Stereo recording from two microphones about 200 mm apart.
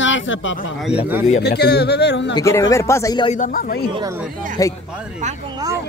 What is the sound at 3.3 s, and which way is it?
Speech, 40° left (ahead or behind).